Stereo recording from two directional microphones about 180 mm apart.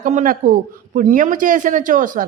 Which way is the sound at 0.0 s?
45° right (ahead or behind).